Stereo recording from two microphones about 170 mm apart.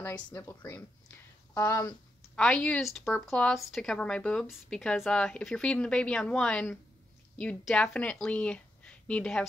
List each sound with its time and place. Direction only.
0.0 s speech: 10° left (ahead or behind)
1.9 s speech: 5° left (ahead or behind)